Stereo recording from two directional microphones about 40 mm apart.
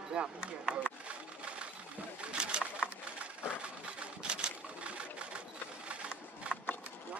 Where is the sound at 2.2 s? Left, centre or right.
Right.